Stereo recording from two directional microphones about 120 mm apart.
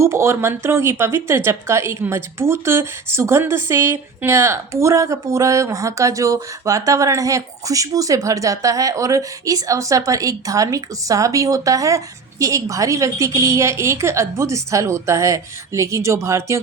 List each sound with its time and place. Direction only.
0.0 s speech: 25° right (ahead or behind)